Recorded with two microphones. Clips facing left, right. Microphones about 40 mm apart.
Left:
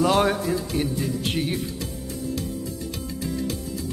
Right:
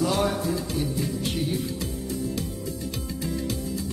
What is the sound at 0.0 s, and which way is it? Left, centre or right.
Music, left.